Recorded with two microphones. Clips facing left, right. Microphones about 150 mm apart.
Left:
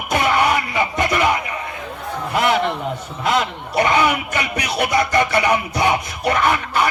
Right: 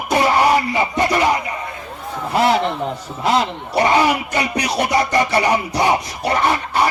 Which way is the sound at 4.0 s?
35° right (ahead or behind).